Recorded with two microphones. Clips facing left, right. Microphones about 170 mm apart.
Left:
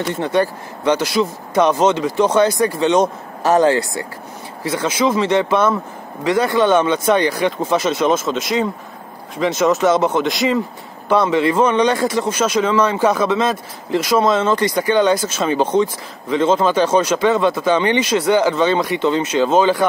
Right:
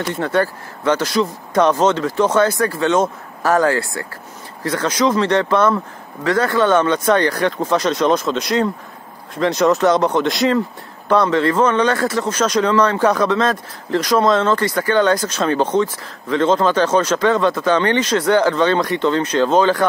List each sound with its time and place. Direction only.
0.2 s speech: 15° left (ahead or behind)
4.6 s speech: 5° left (ahead or behind)